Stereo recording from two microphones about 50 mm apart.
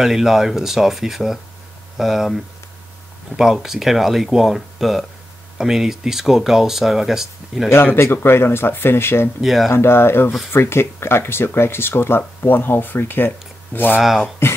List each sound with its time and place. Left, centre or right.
0.0 s speech: centre
7.7 s speech: left
9.4 s speech: centre
9.7 s speech: left
14.4 s speech: left